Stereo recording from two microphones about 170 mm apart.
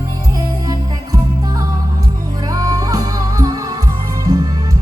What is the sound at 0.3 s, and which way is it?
Music, 20° right (ahead or behind).